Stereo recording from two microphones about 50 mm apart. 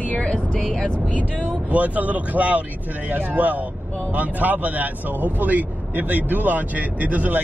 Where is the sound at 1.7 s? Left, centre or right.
Right.